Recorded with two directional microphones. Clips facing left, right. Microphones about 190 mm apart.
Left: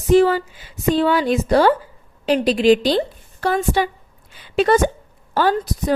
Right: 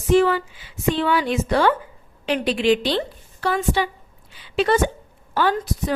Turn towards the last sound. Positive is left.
turn(degrees=40)  # may be behind; listen again after turning